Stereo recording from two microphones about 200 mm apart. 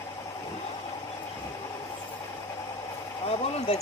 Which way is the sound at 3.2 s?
30° left (ahead or behind).